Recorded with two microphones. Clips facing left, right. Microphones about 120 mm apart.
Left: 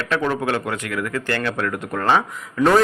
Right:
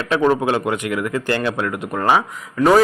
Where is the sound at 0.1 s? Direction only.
20° right (ahead or behind).